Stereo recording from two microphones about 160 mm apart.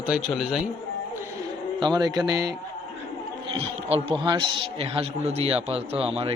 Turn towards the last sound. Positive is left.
turn(degrees=-35)  # may be behind; listen again after turning